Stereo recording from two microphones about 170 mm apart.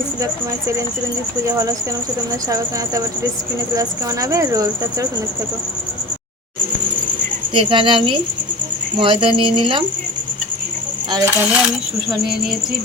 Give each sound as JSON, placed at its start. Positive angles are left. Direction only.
{"t": 1.5, "sound": "speech", "side_deg": -20}
{"t": 3.8, "sound": "speech", "side_deg": -20}
{"t": 7.5, "sound": "speech", "side_deg": -30}
{"t": 11.1, "sound": "speech", "side_deg": -20}
{"t": 11.4, "sound": "speech", "side_deg": -5}